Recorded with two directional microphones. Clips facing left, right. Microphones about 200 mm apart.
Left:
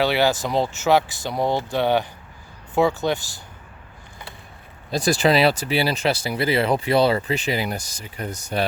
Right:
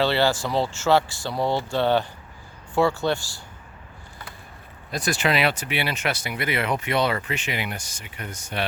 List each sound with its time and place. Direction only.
0.0 s speech: 15° left (ahead or behind)
4.9 s speech: 30° left (ahead or behind)